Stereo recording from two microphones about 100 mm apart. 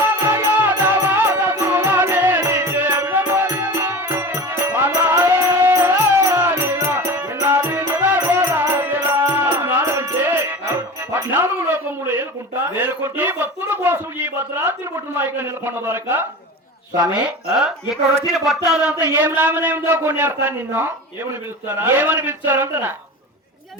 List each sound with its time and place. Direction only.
0.0 s music: 25° right (ahead or behind)
13.1 s a man's voice: 20° right (ahead or behind)
17.2 s a man's voice: 5° right (ahead or behind)